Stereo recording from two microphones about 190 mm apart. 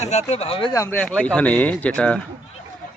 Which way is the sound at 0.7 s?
15° left (ahead or behind).